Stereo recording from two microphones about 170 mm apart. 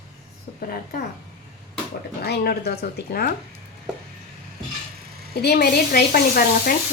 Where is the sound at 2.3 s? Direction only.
65° left (ahead or behind).